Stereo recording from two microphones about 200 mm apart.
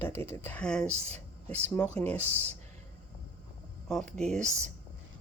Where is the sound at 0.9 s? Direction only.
35° right (ahead or behind).